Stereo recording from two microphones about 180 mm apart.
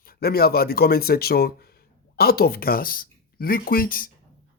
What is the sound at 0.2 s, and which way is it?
Speech, 60° left (ahead or behind).